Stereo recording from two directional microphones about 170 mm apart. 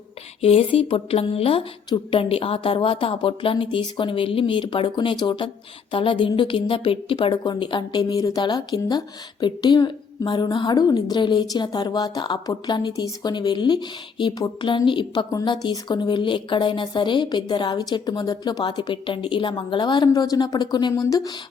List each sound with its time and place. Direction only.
0.4 s a woman's voice: 35° left (ahead or behind); by 21.3 s 20° left (ahead or behind)